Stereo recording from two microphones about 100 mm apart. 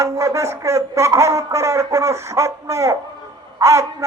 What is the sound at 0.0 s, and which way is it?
Speech, 30° right (ahead or behind).